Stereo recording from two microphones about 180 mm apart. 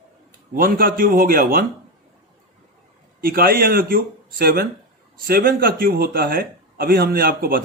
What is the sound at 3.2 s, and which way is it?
A man's voice, 55° right (ahead or behind).